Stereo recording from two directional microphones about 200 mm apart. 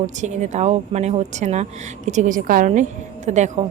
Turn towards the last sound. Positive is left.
turn(degrees=-35)  # may be behind; listen again after turning